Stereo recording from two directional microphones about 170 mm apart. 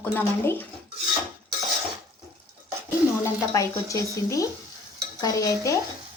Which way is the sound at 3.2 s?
20° left (ahead or behind).